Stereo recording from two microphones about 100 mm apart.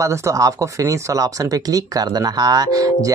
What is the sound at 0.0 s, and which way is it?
Speech, 30° right (ahead or behind).